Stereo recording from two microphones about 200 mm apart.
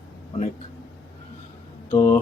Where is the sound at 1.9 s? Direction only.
15° left (ahead or behind).